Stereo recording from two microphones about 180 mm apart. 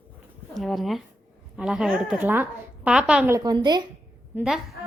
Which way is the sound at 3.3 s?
20° right (ahead or behind).